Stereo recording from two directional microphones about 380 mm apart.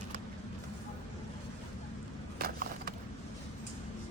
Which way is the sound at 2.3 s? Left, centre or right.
Right.